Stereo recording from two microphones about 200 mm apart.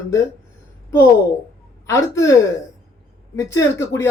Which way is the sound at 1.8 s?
15° left (ahead or behind).